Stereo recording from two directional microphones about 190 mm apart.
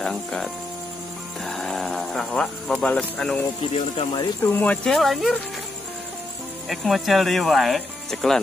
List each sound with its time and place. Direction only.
0.0 s speech: 5° left (ahead or behind)
3.7 s speech: 30° left (ahead or behind)
4.4 s speech: 10° left (ahead or behind)
6.7 s speech: centre (ahead or behind)